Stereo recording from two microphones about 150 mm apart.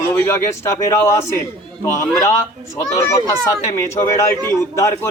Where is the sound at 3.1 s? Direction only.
20° left (ahead or behind).